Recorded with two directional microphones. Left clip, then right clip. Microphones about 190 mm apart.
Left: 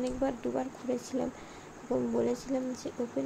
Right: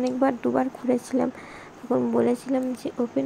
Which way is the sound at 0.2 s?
20° right (ahead or behind).